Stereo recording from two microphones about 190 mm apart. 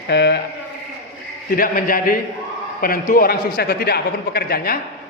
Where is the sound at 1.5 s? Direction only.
50° left (ahead or behind).